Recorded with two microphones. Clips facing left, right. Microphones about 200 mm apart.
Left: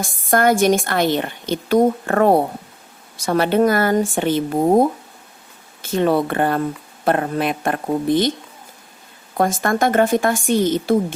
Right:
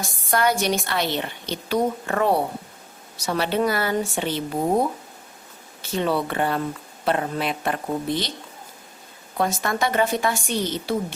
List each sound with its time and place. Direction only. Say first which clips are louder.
0.0 s a woman's voice: left 5 dB; 50° left (ahead or behind)
9.4 s a woman's voice: left 5 dB; 50° left (ahead or behind)